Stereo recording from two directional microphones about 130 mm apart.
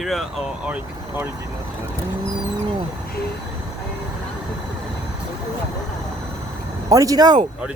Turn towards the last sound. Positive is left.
turn(degrees=-30)  # may be behind; listen again after turning